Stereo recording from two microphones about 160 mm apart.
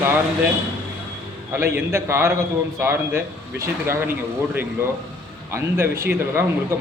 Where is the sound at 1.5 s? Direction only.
15° right (ahead or behind).